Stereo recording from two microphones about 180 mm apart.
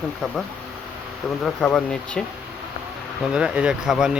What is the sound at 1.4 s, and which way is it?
Speech, 5° left (ahead or behind).